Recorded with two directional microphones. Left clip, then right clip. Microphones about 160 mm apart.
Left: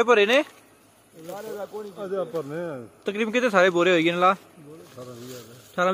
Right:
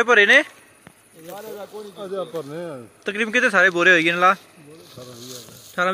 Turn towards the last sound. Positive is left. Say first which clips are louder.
# right 2 dB
turn(degrees=5)  # may be behind; listen again after turning